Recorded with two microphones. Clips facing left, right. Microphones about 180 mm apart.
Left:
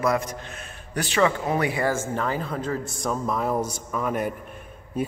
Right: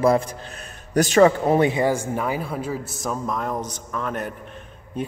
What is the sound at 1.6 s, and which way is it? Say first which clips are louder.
A man's voice: right 5 dB; 20° right (ahead or behind).